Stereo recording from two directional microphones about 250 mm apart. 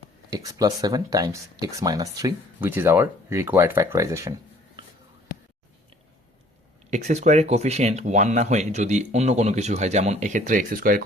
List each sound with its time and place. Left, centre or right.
0.3 s speech: centre
6.9 s speech: right